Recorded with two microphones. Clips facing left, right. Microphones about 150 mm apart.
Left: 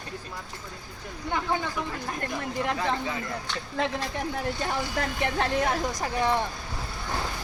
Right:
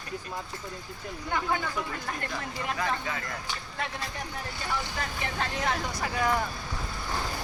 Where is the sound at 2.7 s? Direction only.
25° left (ahead or behind).